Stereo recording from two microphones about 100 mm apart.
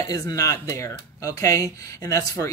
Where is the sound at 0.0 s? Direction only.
35° left (ahead or behind).